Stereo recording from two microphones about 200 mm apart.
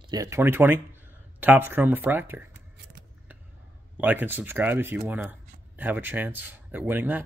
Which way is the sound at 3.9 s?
10° right (ahead or behind).